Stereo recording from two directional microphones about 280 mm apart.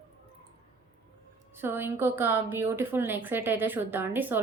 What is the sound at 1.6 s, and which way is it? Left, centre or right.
A woman's voice, centre.